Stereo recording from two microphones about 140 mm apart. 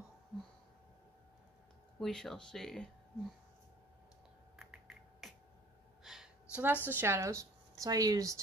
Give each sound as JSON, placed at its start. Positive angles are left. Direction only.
{"t": 2.0, "sound": "speech", "side_deg": 0}
{"t": 4.6, "sound": "typing", "side_deg": 0}
{"t": 6.0, "sound": "gasp", "side_deg": 0}
{"t": 6.5, "sound": "a woman's voice", "side_deg": -10}